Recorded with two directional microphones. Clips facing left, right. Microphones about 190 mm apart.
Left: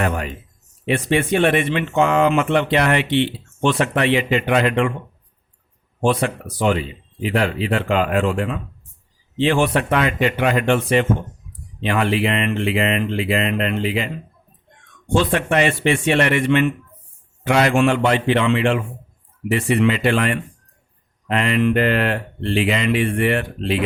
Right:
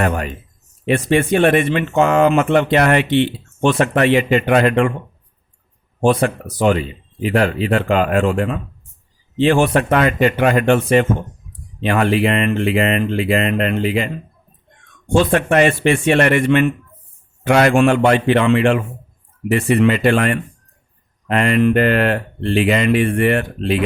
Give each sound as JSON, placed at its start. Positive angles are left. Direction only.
{"t": 0.9, "sound": "speech", "side_deg": -45}
{"t": 6.0, "sound": "speech", "side_deg": -45}
{"t": 15.1, "sound": "speech", "side_deg": -50}